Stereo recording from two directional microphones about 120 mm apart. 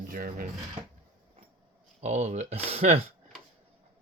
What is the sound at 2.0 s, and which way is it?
Speech, 70° right (ahead or behind).